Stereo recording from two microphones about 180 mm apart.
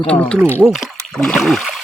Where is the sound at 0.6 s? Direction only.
Centre (ahead or behind).